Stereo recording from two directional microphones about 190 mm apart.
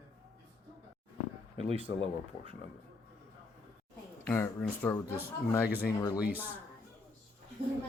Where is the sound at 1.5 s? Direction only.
30° right (ahead or behind).